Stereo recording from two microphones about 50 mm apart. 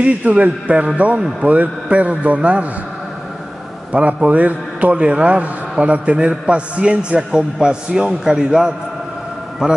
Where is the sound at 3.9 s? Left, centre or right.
Right.